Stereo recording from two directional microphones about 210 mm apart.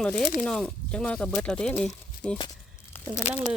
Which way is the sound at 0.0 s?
5° left (ahead or behind).